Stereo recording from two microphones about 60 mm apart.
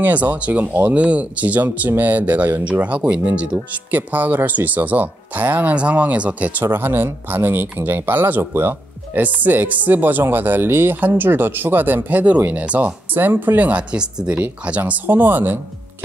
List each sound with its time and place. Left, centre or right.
0.0 s speech: right
3.9 s speech: right